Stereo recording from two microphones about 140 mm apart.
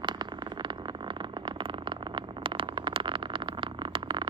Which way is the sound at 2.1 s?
35° right (ahead or behind).